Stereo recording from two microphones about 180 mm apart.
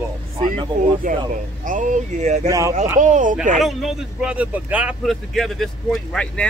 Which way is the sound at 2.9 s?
45° right (ahead or behind).